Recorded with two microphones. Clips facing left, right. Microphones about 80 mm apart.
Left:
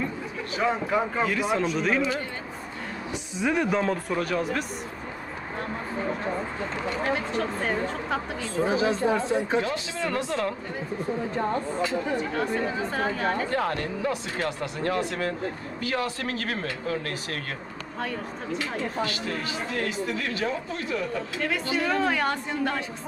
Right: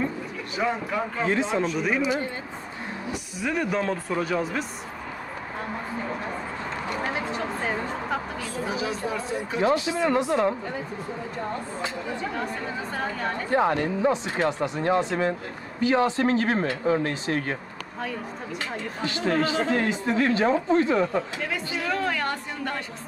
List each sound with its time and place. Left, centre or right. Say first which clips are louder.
0.7 s speech: left 3 dB; centre
1.2 s speech: right 2 dB; right
1.8 s speech: right 1 dB; centre
3.1 s speech: left 3 dB; left
3.5 s speech: even; centre
4.1 s speech: right 1 dB; centre
7.2 s speech: left 1 dB; centre
8.5 s speech: left 6 dB; left
9.6 s speech: right 5 dB; right
12.9 s speech: even; centre
13.5 s speech: right 5 dB; centre
19.0 s speech: right 7 dB; right
21.8 s a woman's voice: left 1 dB; centre